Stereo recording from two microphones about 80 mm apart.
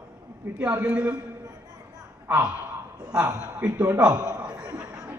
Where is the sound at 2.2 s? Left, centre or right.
Right.